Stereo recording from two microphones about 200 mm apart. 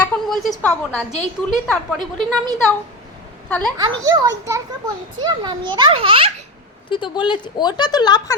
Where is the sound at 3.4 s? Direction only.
5° left (ahead or behind).